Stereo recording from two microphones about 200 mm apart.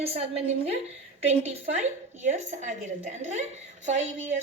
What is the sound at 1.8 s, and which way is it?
A woman's voice, 35° right (ahead or behind).